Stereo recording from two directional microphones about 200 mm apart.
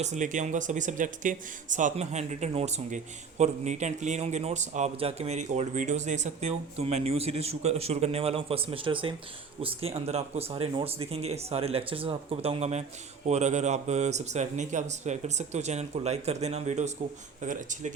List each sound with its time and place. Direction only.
0.0 s speech: 35° right (ahead or behind)